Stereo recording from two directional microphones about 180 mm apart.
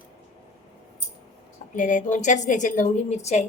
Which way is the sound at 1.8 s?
45° left (ahead or behind).